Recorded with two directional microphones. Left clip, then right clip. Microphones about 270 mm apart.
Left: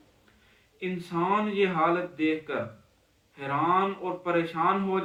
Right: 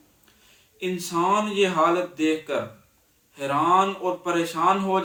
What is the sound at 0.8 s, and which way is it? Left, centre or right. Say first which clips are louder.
Speech: right 5 dB; centre.